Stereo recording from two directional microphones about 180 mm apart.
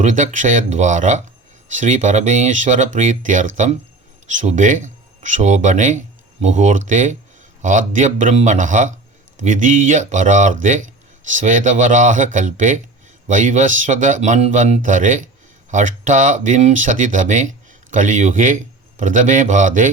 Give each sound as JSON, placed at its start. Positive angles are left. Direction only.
{"t": 0.0, "sound": "a man's voice", "side_deg": -40}